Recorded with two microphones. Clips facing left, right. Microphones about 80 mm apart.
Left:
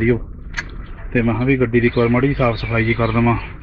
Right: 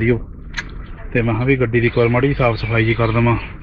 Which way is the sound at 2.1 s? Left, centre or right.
Right.